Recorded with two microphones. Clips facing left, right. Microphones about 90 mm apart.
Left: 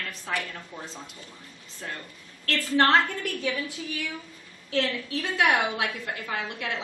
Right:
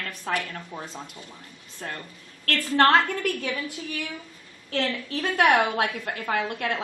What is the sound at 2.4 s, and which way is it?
A woman's voice, 50° right (ahead or behind).